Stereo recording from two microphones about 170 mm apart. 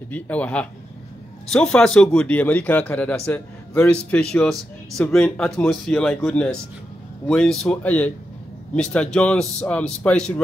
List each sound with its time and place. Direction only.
0.1 s a man's voice: 10° left (ahead or behind)